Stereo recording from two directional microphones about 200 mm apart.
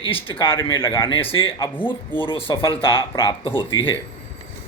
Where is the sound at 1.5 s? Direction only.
15° left (ahead or behind).